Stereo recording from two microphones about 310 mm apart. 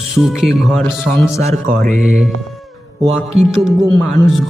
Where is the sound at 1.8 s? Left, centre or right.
Right.